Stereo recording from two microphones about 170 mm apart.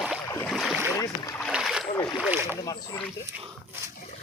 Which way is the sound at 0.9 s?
15° left (ahead or behind).